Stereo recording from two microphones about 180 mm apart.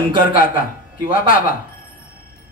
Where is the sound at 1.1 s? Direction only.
50° left (ahead or behind).